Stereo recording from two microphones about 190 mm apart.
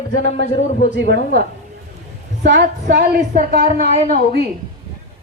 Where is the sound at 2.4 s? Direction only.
60° right (ahead or behind).